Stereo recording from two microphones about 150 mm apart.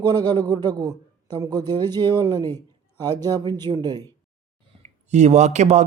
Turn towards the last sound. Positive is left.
turn(degrees=-50)  # may be behind; listen again after turning